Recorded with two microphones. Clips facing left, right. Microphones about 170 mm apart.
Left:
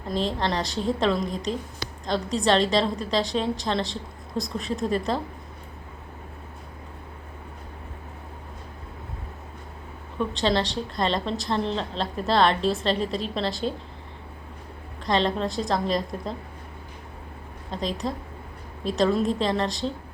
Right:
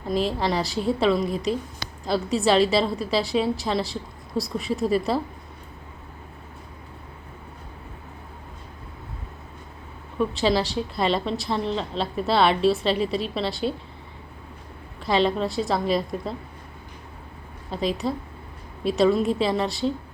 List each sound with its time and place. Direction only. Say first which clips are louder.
0.1 s a woman's voice: right 2 dB; 5° right (ahead or behind)
10.2 s a woman's voice: right 2 dB; 5° right (ahead or behind)
15.0 s a woman's voice: right 2 dB; 5° right (ahead or behind)
17.7 s a woman's voice: right 3 dB; 5° right (ahead or behind)